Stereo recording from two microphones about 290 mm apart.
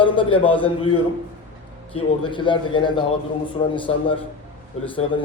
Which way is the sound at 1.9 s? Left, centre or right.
Centre.